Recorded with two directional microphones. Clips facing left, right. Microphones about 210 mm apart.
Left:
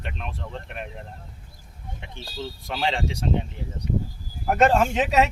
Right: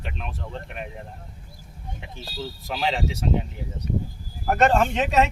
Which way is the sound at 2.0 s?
5° right (ahead or behind).